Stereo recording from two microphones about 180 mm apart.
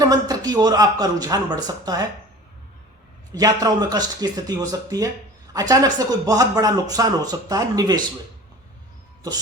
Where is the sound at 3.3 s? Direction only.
20° right (ahead or behind).